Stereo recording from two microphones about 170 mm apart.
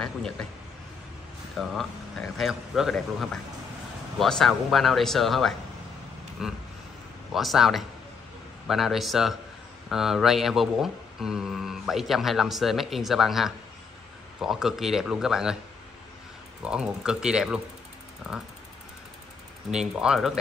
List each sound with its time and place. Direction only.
1.6 s speech: centre (ahead or behind)
16.6 s speech: 5° right (ahead or behind)
19.7 s speech: 5° right (ahead or behind)